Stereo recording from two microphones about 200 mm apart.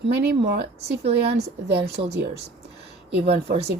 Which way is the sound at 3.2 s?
30° right (ahead or behind).